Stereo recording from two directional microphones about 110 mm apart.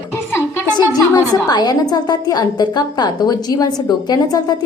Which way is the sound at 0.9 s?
35° left (ahead or behind).